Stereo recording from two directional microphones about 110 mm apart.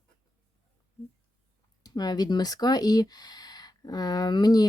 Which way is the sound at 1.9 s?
40° left (ahead or behind).